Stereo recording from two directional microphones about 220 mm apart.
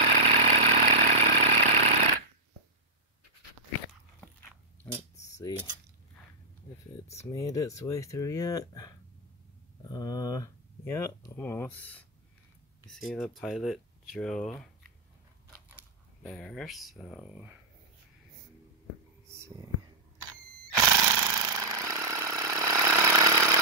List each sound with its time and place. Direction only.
0.0 s vehicle: 30° right (ahead or behind)
7.2 s speech: 15° left (ahead or behind)
15.7 s speech: centre (ahead or behind)
19.2 s whispering: 10° right (ahead or behind)
20.7 s a sound: 15° right (ahead or behind)